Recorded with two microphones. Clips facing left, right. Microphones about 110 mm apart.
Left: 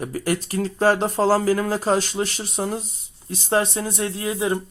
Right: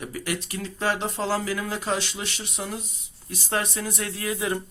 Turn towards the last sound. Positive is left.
turn(degrees=25)  # may be behind; listen again after turning